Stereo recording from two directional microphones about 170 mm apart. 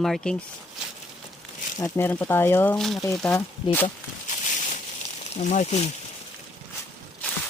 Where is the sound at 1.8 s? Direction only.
15° left (ahead or behind).